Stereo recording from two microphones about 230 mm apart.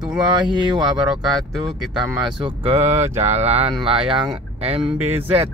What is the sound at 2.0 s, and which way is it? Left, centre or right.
Speech, centre.